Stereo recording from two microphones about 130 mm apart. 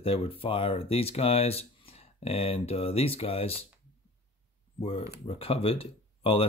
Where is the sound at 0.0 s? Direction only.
45° left (ahead or behind).